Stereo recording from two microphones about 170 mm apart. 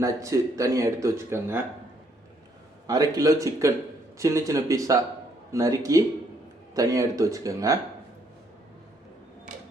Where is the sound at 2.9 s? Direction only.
20° right (ahead or behind).